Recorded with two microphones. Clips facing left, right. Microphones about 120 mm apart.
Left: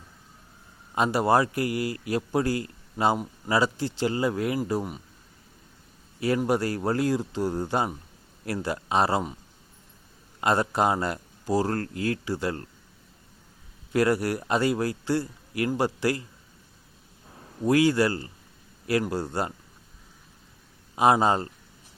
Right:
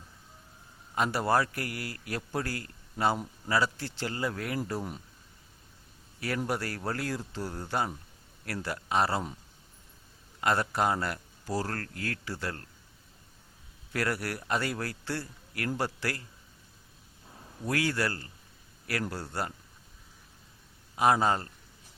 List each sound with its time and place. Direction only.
0.9 s a man's voice: 20° left (ahead or behind)
6.1 s a man's voice: 20° left (ahead or behind)
10.4 s a man's voice: 20° left (ahead or behind)
13.9 s a man's voice: 20° left (ahead or behind)
17.6 s a man's voice: 20° left (ahead or behind)
20.9 s a man's voice: 20° left (ahead or behind)